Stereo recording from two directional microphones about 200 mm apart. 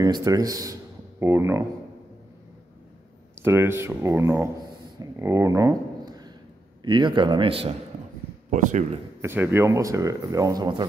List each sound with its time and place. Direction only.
0.0 s speech: 20° right (ahead or behind)
3.3 s speech: 10° right (ahead or behind)
4.9 s a sound: 15° right (ahead or behind)
6.8 s speech: 20° right (ahead or behind)
8.5 s speech: 40° right (ahead or behind)
9.2 s speech: 10° right (ahead or behind)